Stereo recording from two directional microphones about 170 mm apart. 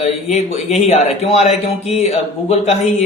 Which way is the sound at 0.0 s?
40° left (ahead or behind).